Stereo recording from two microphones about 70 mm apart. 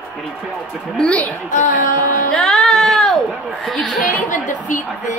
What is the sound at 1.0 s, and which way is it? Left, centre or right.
Speech, centre.